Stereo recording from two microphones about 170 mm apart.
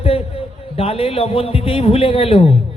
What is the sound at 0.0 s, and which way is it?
A man's voice, 35° left (ahead or behind).